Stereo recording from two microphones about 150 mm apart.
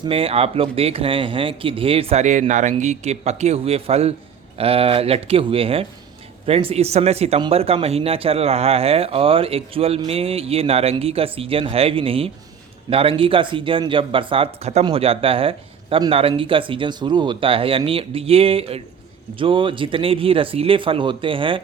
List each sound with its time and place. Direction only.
0.0 s speech: 40° right (ahead or behind)